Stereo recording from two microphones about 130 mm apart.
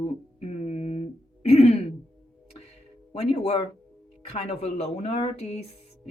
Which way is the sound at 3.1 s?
50° left (ahead or behind).